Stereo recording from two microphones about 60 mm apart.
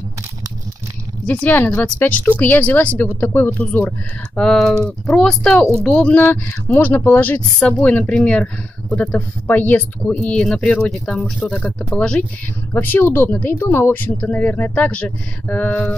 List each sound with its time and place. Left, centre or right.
1.2 s speech: left
4.4 s speech: centre; by 10.1 s left
10.1 s speech: centre
12.7 s speech: left
13.9 s speech: left